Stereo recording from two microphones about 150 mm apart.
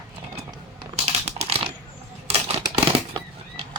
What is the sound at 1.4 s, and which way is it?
Typewriter, 40° right (ahead or behind).